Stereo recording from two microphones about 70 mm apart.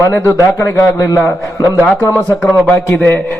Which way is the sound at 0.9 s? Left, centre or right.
Left.